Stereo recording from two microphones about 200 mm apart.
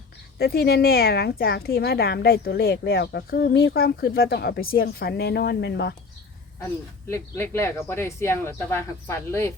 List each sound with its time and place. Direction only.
0.3 s a woman's voice: 50° left (ahead or behind)
7.1 s speech: 10° left (ahead or behind)